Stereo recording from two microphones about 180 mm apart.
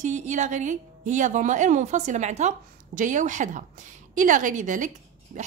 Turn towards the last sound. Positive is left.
turn(degrees=-45)  # may be behind; listen again after turning